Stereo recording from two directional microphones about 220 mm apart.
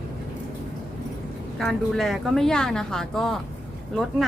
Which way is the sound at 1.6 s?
Centre (ahead or behind).